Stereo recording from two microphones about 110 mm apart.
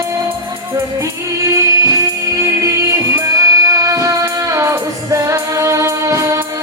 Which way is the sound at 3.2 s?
30° right (ahead or behind).